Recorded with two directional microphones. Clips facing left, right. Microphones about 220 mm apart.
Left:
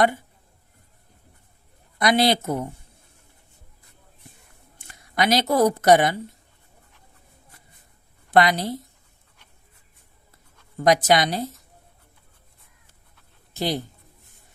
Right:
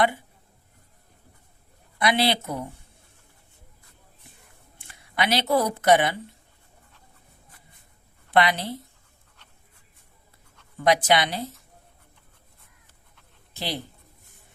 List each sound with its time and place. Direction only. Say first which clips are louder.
2.0 s speech: left 3 dB; 45° left (ahead or behind)
4.8 s speech: left 3 dB; 40° left (ahead or behind)
8.3 s a woman's voice: left 3 dB; 40° left (ahead or behind)
10.8 s a woman's voice: left 3 dB; 40° left (ahead or behind)
13.5 s speech: left 6 dB; 45° left (ahead or behind)